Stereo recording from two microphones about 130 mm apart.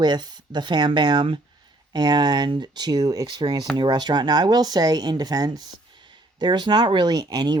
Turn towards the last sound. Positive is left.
turn(degrees=-35)  # may be behind; listen again after turning